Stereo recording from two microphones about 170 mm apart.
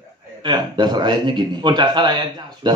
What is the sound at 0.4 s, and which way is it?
Speech, 25° right (ahead or behind).